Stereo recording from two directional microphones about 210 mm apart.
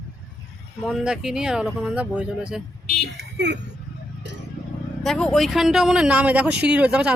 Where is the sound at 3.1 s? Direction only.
55° right (ahead or behind).